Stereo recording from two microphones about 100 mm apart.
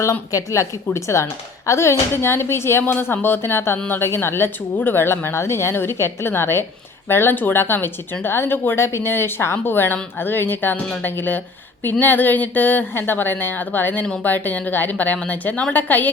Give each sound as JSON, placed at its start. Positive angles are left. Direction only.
{"t": 0.0, "sound": "a woman's voice", "side_deg": 30}